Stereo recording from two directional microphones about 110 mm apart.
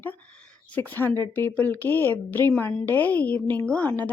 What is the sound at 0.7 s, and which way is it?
Speech, 15° left (ahead or behind).